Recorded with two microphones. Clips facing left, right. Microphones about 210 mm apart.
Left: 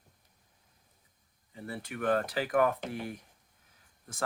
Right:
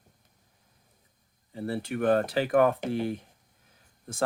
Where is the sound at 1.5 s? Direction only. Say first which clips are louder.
Right 8 dB; 30° right (ahead or behind).